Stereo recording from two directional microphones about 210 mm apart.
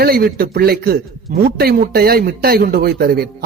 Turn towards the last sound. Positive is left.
turn(degrees=-45)  # may be behind; listen again after turning